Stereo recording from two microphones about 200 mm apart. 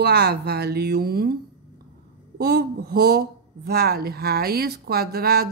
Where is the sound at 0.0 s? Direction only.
55° right (ahead or behind).